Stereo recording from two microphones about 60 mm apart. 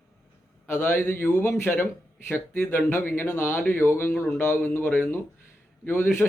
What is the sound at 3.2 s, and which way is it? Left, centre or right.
Speech, left.